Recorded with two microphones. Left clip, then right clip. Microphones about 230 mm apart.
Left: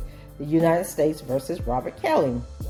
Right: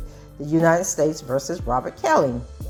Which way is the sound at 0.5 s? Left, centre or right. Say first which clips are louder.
Right 2 dB; right.